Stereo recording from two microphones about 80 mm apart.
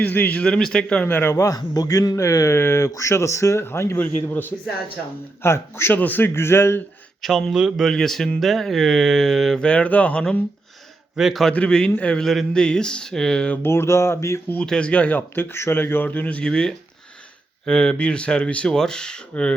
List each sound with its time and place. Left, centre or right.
0.1 s a man's voice: left
0.4 s speech: centre
1.0 s a man's voice: left
1.4 s a man's voice: left
2.1 s a man's voice: left
5.9 s a man's voice: left
7.2 s speech: centre
7.9 s speech: centre
11.2 s speech: centre
11.4 s speech: centre
12.2 s speech: centre
13.6 s speech: left
14.6 s speech: centre